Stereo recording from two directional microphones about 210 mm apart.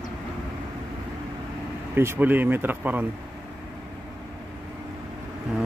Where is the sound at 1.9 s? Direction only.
10° right (ahead or behind).